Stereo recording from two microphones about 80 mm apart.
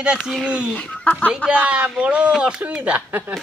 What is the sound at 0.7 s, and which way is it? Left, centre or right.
Speech, centre.